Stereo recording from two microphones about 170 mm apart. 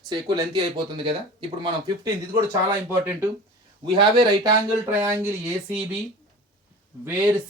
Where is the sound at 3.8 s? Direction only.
25° right (ahead or behind).